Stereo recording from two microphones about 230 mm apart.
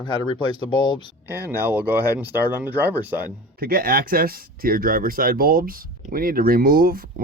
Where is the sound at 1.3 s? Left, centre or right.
Centre.